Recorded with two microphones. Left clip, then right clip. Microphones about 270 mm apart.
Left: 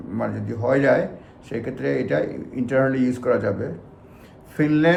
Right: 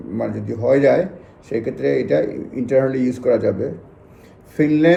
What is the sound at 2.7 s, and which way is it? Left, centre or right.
Speech, centre.